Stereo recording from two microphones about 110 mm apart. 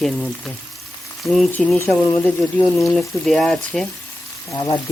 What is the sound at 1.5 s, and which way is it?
Speech, 15° left (ahead or behind).